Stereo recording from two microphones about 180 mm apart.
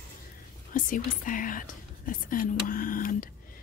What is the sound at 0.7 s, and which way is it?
Speech, 50° left (ahead or behind).